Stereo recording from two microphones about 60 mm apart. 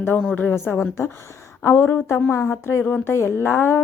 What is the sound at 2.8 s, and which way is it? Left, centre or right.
Speech, left.